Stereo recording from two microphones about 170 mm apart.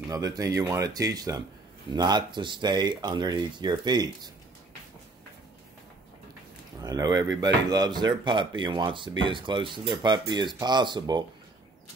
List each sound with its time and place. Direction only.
0.1 s speech: 20° right (ahead or behind)
6.8 s speech: 20° right (ahead or behind)